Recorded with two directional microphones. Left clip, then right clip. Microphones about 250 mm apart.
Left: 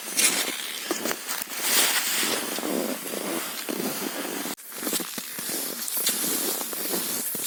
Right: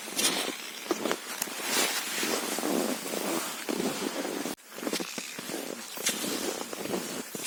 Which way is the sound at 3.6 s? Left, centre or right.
Left.